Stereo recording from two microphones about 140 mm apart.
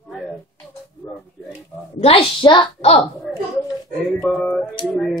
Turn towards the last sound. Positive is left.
turn(degrees=0)  # may be behind; listen again after turning